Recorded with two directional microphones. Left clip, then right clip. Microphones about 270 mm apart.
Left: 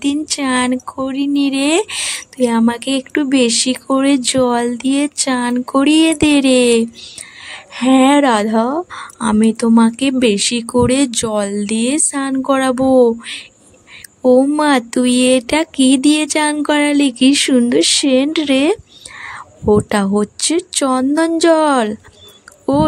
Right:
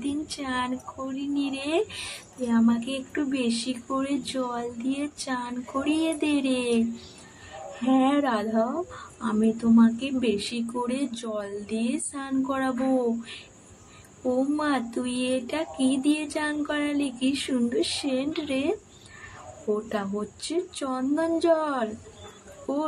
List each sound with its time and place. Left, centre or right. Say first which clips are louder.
0.0 s speech: left 14 dB; left
14.3 s speech: left 14 dB; left
19.9 s speech: left 14 dB; left